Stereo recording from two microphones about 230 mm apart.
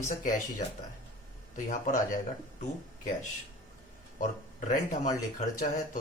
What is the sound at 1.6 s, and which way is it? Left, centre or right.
Speech, left.